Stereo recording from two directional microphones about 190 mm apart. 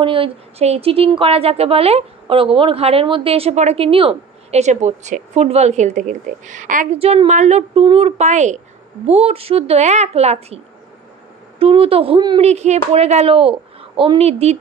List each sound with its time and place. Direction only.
0.0 s speech: 25° right (ahead or behind)
7.0 s speech: 30° right (ahead or behind)
11.6 s speech: 30° right (ahead or behind)
12.4 s speech: 35° right (ahead or behind)